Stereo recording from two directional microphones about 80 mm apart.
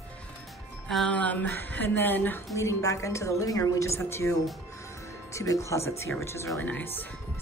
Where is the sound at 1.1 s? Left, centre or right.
Centre.